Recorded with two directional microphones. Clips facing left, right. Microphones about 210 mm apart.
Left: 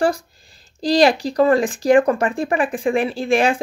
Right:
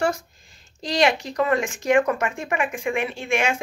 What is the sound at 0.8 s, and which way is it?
Speech, 35° left (ahead or behind).